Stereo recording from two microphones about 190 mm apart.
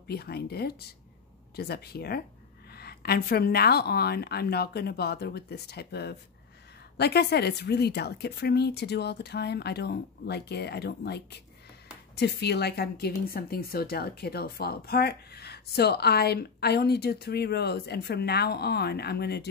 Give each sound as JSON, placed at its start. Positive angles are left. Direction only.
{"t": 0.1, "sound": "a woman's voice", "side_deg": 55}